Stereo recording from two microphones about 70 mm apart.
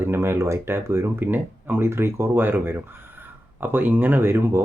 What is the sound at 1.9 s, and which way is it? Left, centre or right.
Speech, right.